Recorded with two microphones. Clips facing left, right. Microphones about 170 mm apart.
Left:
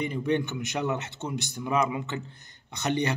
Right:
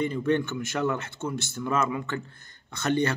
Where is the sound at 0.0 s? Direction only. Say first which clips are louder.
Right 2 dB; 15° left (ahead or behind).